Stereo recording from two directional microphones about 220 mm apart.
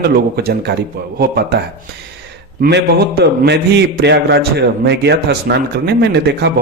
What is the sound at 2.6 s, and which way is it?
A man's voice, 50° right (ahead or behind).